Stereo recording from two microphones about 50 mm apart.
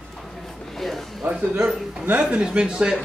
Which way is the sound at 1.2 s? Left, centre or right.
Right.